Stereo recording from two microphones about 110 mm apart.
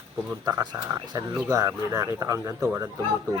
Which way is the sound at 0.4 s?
35° right (ahead or behind).